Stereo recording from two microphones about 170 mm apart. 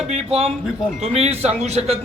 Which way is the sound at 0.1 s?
35° right (ahead or behind).